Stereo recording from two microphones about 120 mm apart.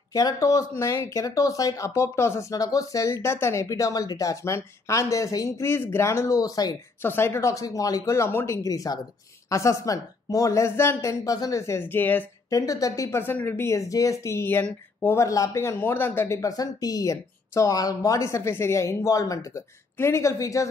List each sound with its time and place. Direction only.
0.1 s speech: 30° left (ahead or behind)
7.0 s speech: 20° left (ahead or behind)
12.4 s speech: 30° left (ahead or behind)
15.1 s speech: 25° left (ahead or behind)